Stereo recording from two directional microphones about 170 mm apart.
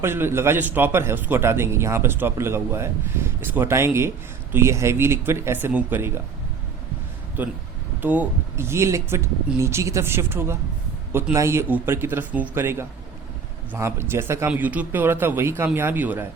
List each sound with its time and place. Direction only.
0.0 s speech: 15° right (ahead or behind)
7.4 s speech: 10° right (ahead or behind)